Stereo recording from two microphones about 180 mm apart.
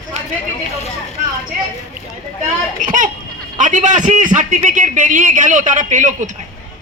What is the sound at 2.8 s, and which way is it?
A man's voice, 50° right (ahead or behind).